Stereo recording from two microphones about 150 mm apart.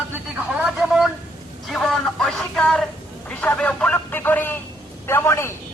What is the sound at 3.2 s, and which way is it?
Telephone, 10° left (ahead or behind).